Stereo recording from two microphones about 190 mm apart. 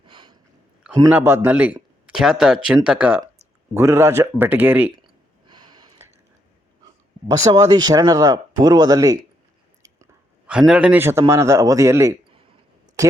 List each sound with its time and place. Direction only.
0.1 s a sound: 25° right (ahead or behind)
1.1 s a man's voice: 10° right (ahead or behind)
5.5 s snort: 25° right (ahead or behind)
7.3 s speech: 20° right (ahead or behind)